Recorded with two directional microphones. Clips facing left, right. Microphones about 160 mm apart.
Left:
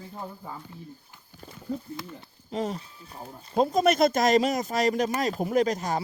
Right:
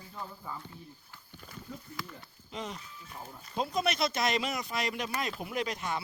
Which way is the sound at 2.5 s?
40° left (ahead or behind).